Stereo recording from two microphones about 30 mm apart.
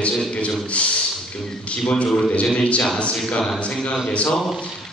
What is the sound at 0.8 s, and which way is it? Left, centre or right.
Speech, left.